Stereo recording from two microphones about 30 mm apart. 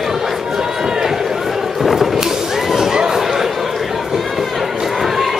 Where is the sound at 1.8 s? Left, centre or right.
Centre.